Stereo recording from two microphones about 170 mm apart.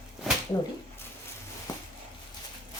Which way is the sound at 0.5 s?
20° left (ahead or behind).